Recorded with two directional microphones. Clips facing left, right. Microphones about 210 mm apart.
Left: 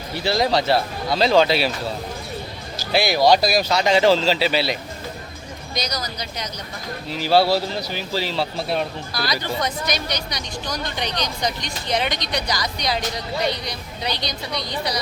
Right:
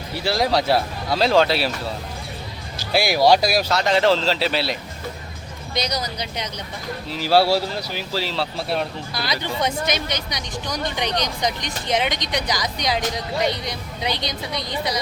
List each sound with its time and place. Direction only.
0.3 s speech: 5° right (ahead or behind)
2.9 s speech: 10° right (ahead or behind)
5.7 s speech: 30° right (ahead or behind)
7.1 s speech: 5° right (ahead or behind)
9.1 s speech: 25° right (ahead or behind)
14.0 s speech: 20° right (ahead or behind)